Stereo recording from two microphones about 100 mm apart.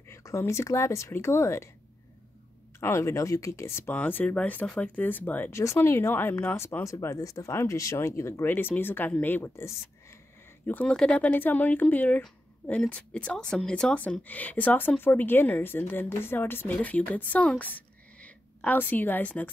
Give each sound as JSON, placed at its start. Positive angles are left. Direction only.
{"t": 0.1, "sound": "speech", "side_deg": 30}
{"t": 2.8, "sound": "speech", "side_deg": 25}
{"t": 10.7, "sound": "a woman's voice", "side_deg": 10}